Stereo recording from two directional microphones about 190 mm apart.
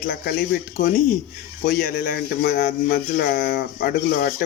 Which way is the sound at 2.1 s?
60° left (ahead or behind).